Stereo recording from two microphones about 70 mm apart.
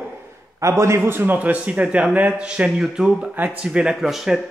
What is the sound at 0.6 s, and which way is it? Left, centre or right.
Speech, right.